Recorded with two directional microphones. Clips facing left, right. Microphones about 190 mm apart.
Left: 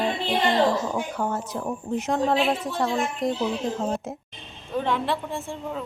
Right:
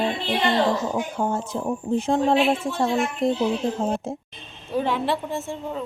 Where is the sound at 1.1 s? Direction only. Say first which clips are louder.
Right 3 dB; 25° right (ahead or behind).